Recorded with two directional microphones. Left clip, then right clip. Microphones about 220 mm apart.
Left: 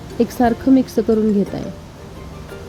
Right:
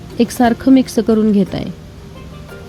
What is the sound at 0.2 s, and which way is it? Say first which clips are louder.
A woman's voice: right 3 dB; 25° right (ahead or behind).